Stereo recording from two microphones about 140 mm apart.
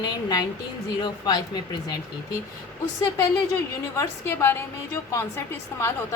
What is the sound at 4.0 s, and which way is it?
A woman's voice, 20° left (ahead or behind).